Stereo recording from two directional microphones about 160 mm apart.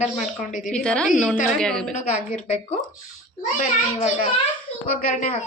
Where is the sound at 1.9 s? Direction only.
45° left (ahead or behind).